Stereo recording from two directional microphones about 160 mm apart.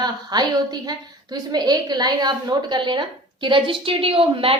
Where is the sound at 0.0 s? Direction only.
25° right (ahead or behind).